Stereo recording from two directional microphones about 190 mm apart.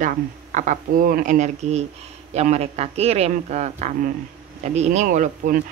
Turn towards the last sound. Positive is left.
turn(degrees=-45)  # may be behind; listen again after turning